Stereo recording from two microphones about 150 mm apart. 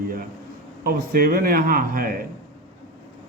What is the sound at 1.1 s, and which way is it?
Speech, 75° right (ahead or behind).